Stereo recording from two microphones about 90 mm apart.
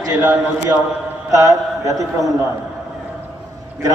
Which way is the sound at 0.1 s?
20° right (ahead or behind).